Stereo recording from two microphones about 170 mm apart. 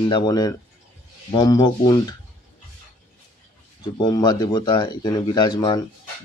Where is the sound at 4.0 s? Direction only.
25° left (ahead or behind).